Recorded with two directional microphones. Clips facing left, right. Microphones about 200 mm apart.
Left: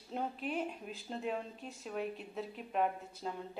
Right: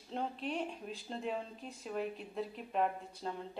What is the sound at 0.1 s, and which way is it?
A woman's voice, 5° left (ahead or behind).